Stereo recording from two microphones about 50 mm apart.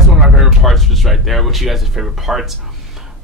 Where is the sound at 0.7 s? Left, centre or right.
Centre.